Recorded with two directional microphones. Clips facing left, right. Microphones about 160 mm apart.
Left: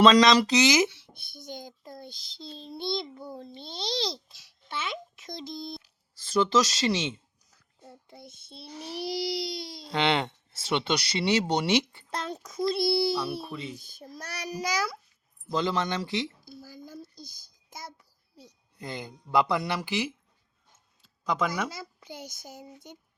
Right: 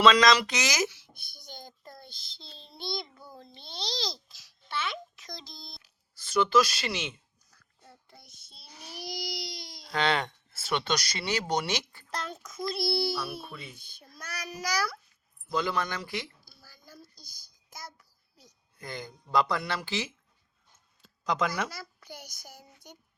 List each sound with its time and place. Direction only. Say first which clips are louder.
0.0 s a child's voice: left 3 dB; 30° left (ahead or behind)
0.4 s a sound: left 8 dB; 30° left (ahead or behind); by 2.0 s 15° left (ahead or behind)
2.9 s a child's voice: left 3 dB; 25° left (ahead or behind)
13.7 s a child's voice: left 8 dB; 40° left (ahead or behind); by 20.1 s 15° left (ahead or behind)
21.2 s speech: left 1 dB; 10° left (ahead or behind)
21.7 s a child's voice: left 3 dB; 20° left (ahead or behind)